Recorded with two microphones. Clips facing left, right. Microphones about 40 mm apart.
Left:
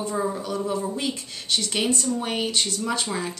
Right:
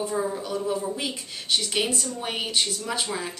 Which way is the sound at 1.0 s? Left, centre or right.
Centre.